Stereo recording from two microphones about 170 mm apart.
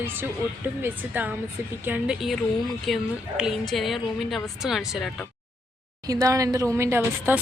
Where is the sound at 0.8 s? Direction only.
10° right (ahead or behind).